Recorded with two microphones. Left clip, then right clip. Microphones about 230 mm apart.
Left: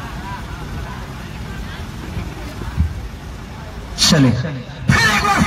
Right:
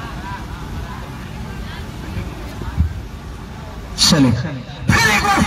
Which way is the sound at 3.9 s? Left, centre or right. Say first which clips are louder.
Even; right.